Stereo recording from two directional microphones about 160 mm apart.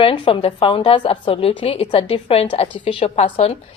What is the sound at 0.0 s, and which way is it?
A woman's voice, 35° left (ahead or behind).